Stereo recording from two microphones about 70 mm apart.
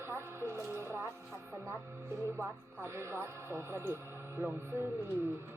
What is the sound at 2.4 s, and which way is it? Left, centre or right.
Speech, right.